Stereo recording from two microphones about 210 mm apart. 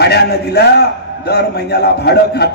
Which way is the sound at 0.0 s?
50° left (ahead or behind).